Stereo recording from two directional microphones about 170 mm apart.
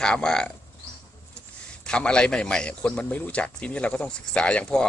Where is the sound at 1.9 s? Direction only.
5° left (ahead or behind).